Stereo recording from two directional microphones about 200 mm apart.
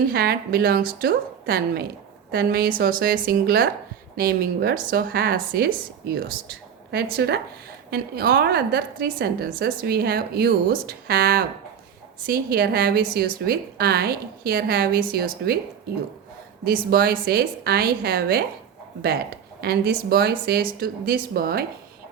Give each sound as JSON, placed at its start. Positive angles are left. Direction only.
{"t": 0.1, "sound": "a woman's voice", "side_deg": -50}
{"t": 16.6, "sound": "a woman's voice", "side_deg": -50}